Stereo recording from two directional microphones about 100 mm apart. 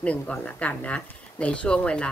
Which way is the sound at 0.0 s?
15° left (ahead or behind).